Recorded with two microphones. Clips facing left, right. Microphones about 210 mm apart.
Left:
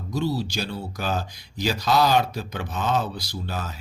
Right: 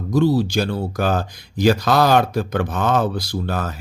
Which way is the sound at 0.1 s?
50° right (ahead or behind).